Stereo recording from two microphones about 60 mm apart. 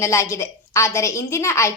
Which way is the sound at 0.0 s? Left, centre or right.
Left.